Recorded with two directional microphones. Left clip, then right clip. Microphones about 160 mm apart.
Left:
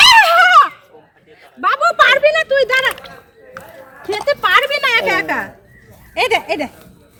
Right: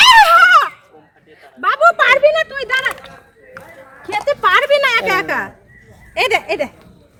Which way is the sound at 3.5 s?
5° right (ahead or behind).